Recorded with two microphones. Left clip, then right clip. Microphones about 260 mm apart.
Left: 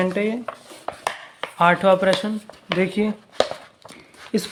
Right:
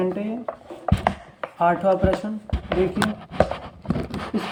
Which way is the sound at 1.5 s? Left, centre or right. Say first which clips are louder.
Left 3 dB; left.